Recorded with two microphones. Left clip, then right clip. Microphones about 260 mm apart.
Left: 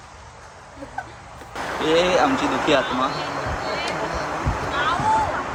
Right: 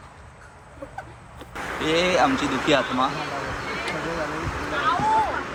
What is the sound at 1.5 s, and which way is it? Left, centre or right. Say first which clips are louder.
Vehicle: left 3 dB; left.